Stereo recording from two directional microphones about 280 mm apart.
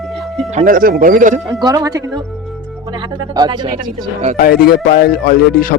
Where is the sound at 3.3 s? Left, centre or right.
Centre.